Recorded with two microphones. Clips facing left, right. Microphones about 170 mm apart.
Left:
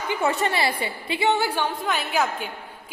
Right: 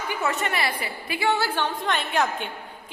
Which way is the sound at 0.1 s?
30° left (ahead or behind).